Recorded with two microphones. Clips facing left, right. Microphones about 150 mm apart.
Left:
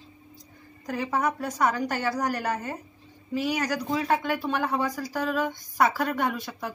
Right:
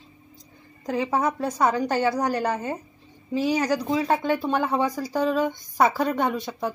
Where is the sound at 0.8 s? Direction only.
25° right (ahead or behind).